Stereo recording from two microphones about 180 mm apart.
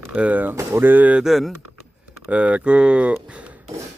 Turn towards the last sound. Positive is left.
turn(degrees=-5)  # may be behind; listen again after turning